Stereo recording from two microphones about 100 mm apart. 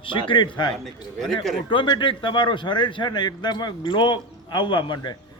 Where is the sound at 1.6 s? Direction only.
55° left (ahead or behind).